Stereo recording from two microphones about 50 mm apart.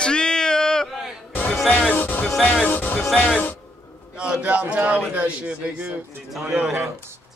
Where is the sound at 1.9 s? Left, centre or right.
Left.